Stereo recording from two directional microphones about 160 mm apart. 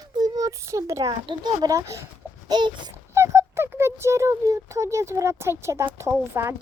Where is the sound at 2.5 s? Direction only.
30° right (ahead or behind).